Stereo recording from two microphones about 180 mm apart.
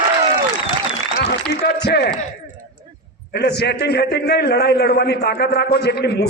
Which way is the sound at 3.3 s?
70° left (ahead or behind).